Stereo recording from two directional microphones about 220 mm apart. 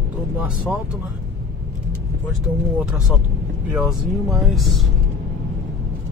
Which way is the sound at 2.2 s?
5° right (ahead or behind).